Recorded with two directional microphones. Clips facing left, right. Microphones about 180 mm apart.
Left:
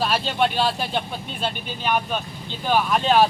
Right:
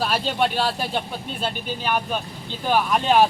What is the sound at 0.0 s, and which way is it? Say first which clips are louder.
Speech: even; 5° right (ahead or behind).